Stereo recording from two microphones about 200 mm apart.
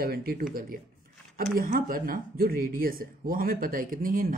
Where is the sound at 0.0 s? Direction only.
50° right (ahead or behind).